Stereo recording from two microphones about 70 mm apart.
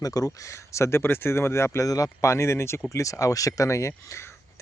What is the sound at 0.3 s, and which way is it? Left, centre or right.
Speech, left.